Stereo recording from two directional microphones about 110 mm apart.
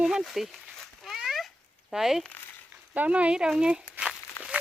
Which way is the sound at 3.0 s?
10° right (ahead or behind).